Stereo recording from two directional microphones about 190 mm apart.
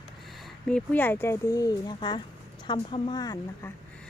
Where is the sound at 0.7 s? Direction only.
10° left (ahead or behind).